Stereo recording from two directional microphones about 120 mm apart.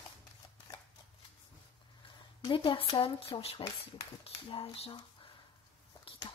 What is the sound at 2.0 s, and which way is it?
Speech, 45° left (ahead or behind).